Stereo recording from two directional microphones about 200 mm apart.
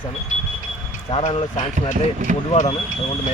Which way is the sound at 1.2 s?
30° left (ahead or behind).